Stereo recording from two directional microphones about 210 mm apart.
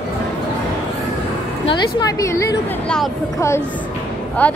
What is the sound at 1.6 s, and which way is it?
A woman's voice, 20° left (ahead or behind).